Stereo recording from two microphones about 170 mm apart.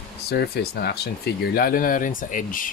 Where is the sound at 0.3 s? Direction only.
70° left (ahead or behind).